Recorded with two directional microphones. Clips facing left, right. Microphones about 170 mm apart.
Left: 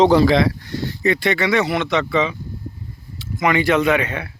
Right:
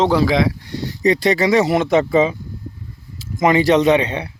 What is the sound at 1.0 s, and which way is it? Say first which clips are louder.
Speech: right 4 dB; 35° right (ahead or behind).